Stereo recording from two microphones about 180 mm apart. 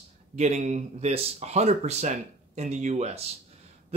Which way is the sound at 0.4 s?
40° right (ahead or behind).